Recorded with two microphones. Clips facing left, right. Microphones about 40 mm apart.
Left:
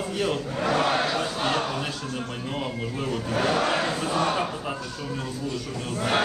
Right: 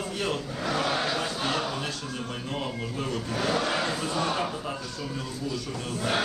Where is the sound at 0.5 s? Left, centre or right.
Left.